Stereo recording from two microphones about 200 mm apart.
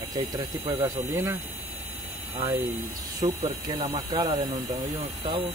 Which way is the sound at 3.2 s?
25° right (ahead or behind).